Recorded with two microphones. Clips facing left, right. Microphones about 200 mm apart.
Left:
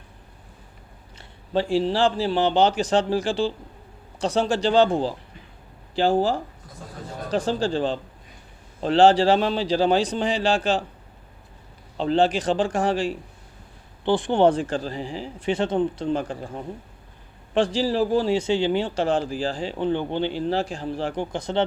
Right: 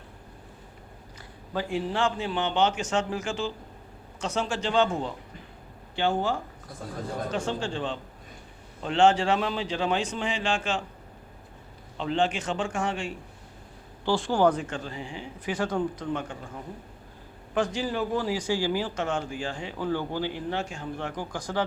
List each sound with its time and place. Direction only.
1.2 s a man's voice: 30° left (ahead or behind)
11.9 s a man's voice: 35° left (ahead or behind)
14.0 s a man's voice: 20° left (ahead or behind)